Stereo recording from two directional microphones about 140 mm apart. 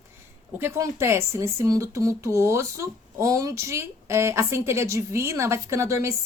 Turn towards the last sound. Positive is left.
turn(degrees=-20)  # may be behind; listen again after turning